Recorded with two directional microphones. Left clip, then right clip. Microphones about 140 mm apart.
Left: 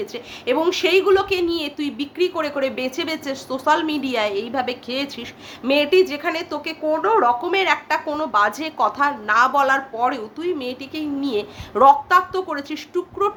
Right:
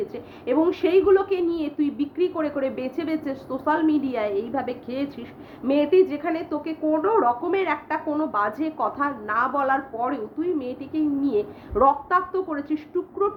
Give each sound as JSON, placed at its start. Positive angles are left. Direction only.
{"t": 0.0, "sound": "speech", "side_deg": 20}